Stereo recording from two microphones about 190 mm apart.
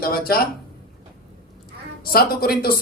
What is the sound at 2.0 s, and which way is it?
Speech, 50° left (ahead or behind).